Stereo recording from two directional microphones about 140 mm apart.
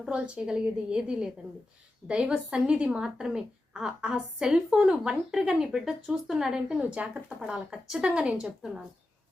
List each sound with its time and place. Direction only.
0.0 s a woman's voice: 5° right (ahead or behind)